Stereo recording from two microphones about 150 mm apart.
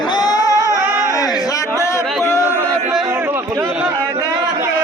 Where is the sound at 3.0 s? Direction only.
10° right (ahead or behind).